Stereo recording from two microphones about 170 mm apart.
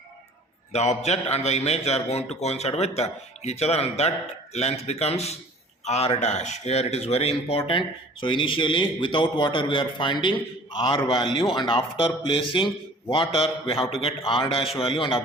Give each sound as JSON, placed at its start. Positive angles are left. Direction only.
{"t": 0.7, "sound": "a man's voice", "side_deg": 40}